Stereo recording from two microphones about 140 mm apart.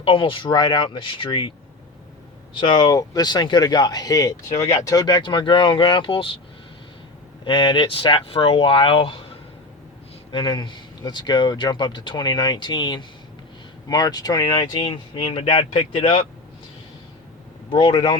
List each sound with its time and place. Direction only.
0.0 s speech: 40° left (ahead or behind)
2.6 s speech: 30° left (ahead or behind)
7.4 s speech: 35° left (ahead or behind)
10.3 s speech: 35° left (ahead or behind)
17.7 s speech: 30° left (ahead or behind)